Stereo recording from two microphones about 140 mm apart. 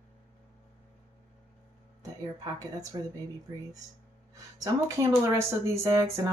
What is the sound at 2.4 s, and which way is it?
Speech, 25° right (ahead or behind).